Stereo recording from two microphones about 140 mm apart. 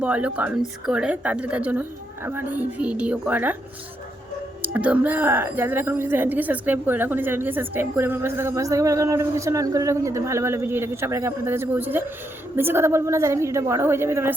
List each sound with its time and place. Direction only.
0.0 s a woman's voice: 10° right (ahead or behind)
4.6 s a woman's voice: 10° right (ahead or behind)